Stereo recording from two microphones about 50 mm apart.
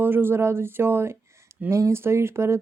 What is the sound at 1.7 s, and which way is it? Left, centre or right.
Speech, right.